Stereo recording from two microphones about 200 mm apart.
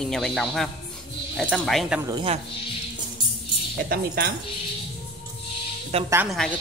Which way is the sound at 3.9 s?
50° right (ahead or behind).